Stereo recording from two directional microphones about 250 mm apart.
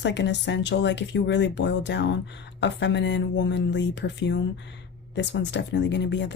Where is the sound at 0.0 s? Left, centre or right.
Left.